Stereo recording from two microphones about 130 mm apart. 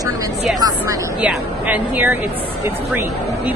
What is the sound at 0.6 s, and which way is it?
Speech, 30° right (ahead or behind).